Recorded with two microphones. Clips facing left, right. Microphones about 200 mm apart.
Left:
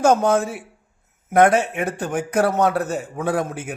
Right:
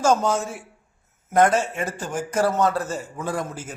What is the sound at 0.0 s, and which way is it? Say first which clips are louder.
A man's voice: left 4 dB; 60° left (ahead or behind).